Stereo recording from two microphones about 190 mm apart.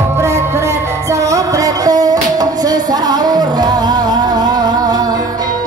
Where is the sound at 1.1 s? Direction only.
15° right (ahead or behind).